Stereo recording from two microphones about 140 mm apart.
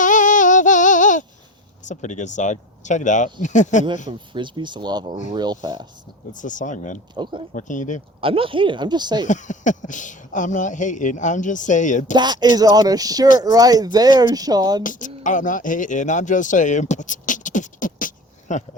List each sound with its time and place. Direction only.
0.0 s female singing: 65° left (ahead or behind)
1.8 s speech: 60° left (ahead or behind)
4.3 s speech: 35° right (ahead or behind)
6.3 s speech: 65° left (ahead or behind)
7.1 s speech: 35° right (ahead or behind)
7.5 s speech: 65° left (ahead or behind)
8.2 s speech: 40° right (ahead or behind)
9.2 s speech: 60° left (ahead or behind)
12.1 s speech: 30° right (ahead or behind)
14.8 s speech: 65° left (ahead or behind)